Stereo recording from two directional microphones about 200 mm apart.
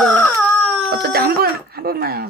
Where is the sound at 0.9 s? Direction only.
50° right (ahead or behind).